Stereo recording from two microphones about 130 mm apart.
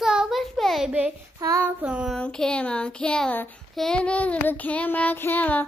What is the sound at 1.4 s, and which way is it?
Child singing, 25° right (ahead or behind).